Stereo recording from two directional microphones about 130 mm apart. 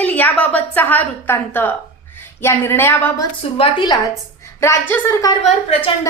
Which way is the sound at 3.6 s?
40° left (ahead or behind).